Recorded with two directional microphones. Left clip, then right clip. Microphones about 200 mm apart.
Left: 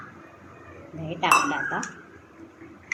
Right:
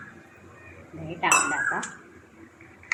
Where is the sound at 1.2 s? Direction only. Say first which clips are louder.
Left 1 dB; centre (ahead or behind).